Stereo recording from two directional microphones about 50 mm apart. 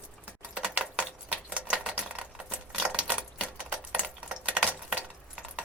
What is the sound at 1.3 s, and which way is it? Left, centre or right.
Typewriter, right.